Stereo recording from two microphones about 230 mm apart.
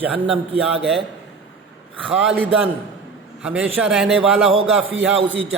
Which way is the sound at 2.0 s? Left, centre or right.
Centre.